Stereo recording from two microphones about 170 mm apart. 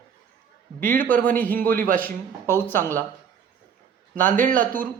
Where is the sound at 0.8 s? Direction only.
55° right (ahead or behind).